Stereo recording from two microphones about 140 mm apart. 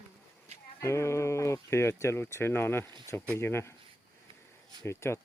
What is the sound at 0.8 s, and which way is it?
Speech, 20° left (ahead or behind).